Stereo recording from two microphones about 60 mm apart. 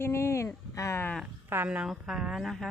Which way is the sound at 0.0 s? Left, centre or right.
Left.